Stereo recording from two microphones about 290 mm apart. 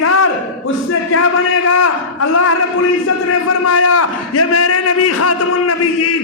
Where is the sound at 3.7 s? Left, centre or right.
Left.